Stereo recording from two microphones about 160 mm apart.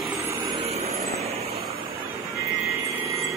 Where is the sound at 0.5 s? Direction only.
40° right (ahead or behind).